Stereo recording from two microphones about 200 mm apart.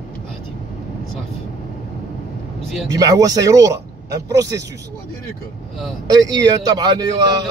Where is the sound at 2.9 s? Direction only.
15° right (ahead or behind).